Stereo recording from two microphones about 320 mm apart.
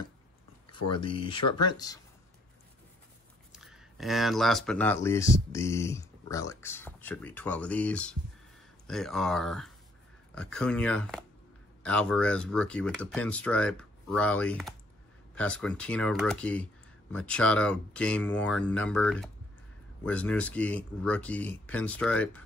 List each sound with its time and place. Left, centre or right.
0.9 s speech: centre
3.5 s speech: centre